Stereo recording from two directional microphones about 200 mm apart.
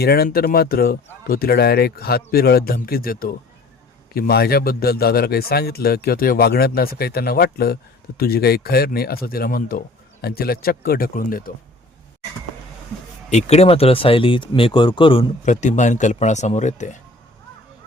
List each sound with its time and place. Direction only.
0.0 s a man's voice: 50° left (ahead or behind)
13.3 s speech: 30° left (ahead or behind)